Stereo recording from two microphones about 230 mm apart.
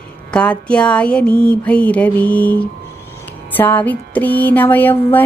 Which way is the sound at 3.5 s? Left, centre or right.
Centre.